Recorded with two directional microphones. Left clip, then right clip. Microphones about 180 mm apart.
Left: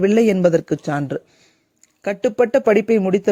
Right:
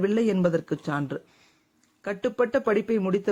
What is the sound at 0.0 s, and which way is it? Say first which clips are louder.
A man's voice: left 9 dB; 35° left (ahead or behind).